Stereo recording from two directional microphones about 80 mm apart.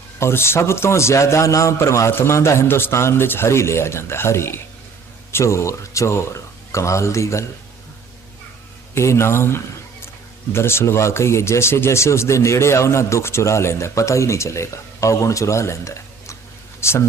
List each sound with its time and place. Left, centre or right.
0.2 s speech: left
9.0 s speech: left